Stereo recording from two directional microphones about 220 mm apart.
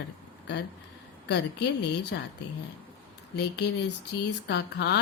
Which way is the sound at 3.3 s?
50° left (ahead or behind).